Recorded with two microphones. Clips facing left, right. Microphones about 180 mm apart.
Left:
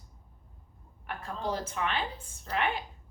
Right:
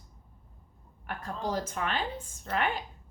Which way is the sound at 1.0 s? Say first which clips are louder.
Even; 45° right (ahead or behind).